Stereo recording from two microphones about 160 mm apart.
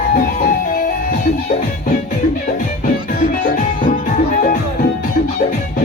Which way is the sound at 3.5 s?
60° left (ahead or behind).